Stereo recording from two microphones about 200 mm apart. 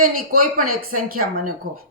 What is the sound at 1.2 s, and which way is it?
Speech, 45° right (ahead or behind).